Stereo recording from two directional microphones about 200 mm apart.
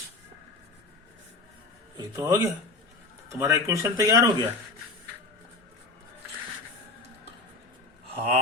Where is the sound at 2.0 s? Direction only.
15° right (ahead or behind).